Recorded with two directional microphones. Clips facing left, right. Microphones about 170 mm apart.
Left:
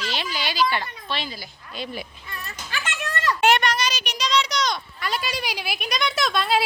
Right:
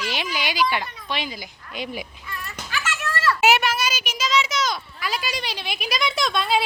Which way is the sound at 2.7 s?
25° left (ahead or behind).